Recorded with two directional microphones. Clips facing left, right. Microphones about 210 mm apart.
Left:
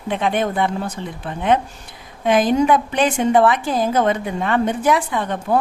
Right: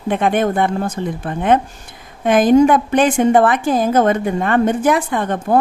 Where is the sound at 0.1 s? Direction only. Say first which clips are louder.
Right 4 dB; 50° right (ahead or behind).